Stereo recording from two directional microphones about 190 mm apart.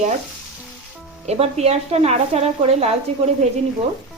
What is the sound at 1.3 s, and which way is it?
Speech, 35° right (ahead or behind).